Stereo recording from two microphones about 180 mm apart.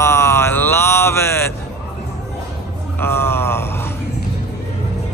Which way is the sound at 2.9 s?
15° left (ahead or behind).